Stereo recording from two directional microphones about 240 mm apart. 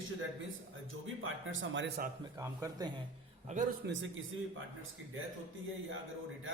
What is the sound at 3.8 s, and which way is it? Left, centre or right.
Speech, right.